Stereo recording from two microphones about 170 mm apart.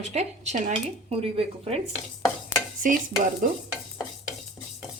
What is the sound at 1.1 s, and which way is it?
Speech, 35° right (ahead or behind).